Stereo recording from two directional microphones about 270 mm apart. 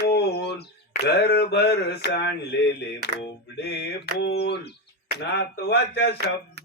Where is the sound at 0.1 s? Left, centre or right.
Left.